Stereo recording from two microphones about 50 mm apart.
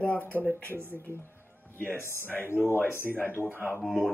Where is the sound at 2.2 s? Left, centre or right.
Left.